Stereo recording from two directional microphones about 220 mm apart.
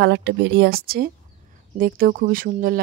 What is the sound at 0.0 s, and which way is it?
Speech, 50° right (ahead or behind).